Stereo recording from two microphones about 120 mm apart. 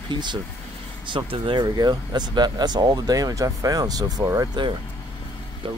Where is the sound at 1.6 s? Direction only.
35° right (ahead or behind).